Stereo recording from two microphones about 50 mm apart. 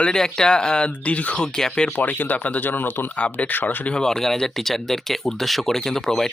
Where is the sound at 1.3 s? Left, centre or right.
Centre.